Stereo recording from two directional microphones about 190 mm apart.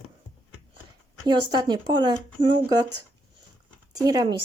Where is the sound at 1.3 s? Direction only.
20° right (ahead or behind).